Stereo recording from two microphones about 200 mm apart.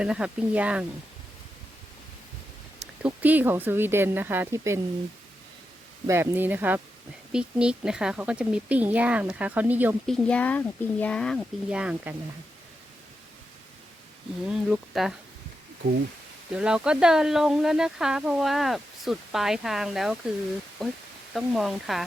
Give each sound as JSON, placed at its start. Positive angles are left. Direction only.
{"t": 0.0, "sound": "speech", "side_deg": -5}
{"t": 2.8, "sound": "speech", "side_deg": -5}
{"t": 6.1, "sound": "speech", "side_deg": -10}
{"t": 10.1, "sound": "speech", "side_deg": 5}
{"t": 14.4, "sound": "speech", "side_deg": 0}
{"t": 16.5, "sound": "speech", "side_deg": -5}